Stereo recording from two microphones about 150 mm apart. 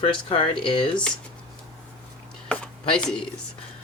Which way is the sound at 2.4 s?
5° left (ahead or behind).